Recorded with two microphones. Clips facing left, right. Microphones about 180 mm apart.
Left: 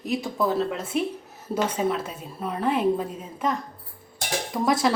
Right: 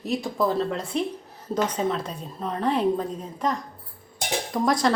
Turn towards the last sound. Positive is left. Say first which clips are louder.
# even
turn(degrees=5)  # may be behind; listen again after turning